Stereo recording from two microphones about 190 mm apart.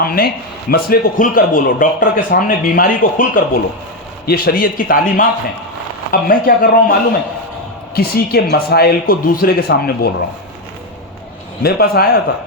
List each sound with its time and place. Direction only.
0.0 s a man's voice: 50° left (ahead or behind)
7.9 s a man's voice: 55° left (ahead or behind)
11.6 s a man's voice: 55° left (ahead or behind)